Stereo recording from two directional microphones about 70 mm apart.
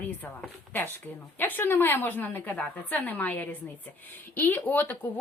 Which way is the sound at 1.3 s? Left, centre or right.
Left.